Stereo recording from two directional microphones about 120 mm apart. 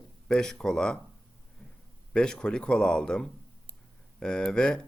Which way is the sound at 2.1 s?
5° left (ahead or behind).